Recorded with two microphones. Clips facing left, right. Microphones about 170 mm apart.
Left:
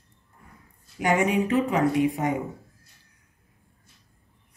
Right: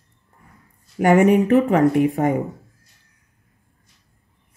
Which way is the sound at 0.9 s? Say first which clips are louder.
Right 8 dB; 50° right (ahead or behind).